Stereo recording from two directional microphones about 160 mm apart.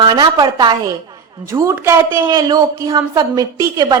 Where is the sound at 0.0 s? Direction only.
30° right (ahead or behind).